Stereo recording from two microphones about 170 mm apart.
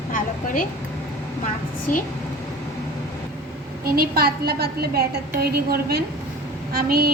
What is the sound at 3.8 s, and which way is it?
A woman's voice, 60° right (ahead or behind).